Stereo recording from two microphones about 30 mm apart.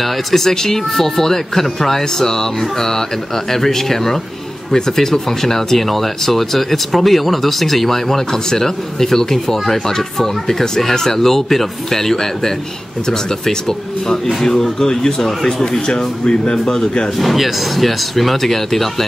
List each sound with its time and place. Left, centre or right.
0.0 s speech: centre
15.9 s speech: left
17.2 s speech: centre